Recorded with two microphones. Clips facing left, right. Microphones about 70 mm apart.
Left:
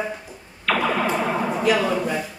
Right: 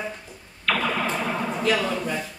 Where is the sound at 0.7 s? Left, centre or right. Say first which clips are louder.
Left 3 dB; centre.